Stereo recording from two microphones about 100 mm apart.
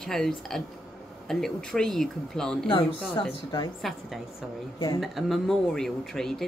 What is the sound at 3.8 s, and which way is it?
Speech, 5° right (ahead or behind).